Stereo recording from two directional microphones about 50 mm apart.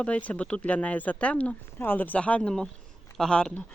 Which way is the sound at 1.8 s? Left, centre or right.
Left.